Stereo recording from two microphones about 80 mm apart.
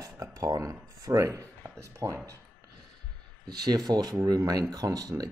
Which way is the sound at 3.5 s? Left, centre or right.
Right.